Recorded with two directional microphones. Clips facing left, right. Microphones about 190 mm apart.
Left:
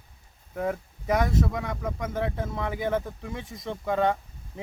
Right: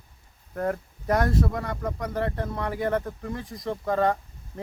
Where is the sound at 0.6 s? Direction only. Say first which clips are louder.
Right 1 dB; centre (ahead or behind).